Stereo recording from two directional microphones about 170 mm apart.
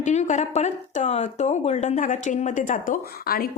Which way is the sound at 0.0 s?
45° left (ahead or behind).